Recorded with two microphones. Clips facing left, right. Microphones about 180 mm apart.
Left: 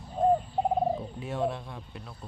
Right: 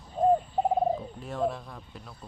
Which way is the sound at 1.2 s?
Centre (ahead or behind).